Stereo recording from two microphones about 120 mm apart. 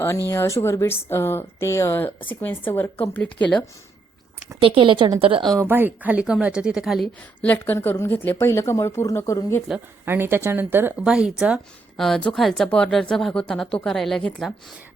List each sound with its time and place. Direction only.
0.3 s a woman's voice: 25° left (ahead or behind)
4.6 s a woman's voice: 45° right (ahead or behind)
5.2 s a woman's voice: 45° right (ahead or behind)
5.5 s speech: 20° right (ahead or behind); by 7.1 s centre (ahead or behind)
7.4 s speech: 15° left (ahead or behind)
10.1 s speech: 20° right (ahead or behind)
11.0 s speech: 5° right (ahead or behind)
11.9 s speech: 5° left (ahead or behind)